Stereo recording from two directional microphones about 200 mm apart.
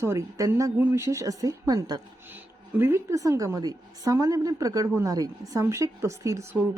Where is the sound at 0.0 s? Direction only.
15° right (ahead or behind).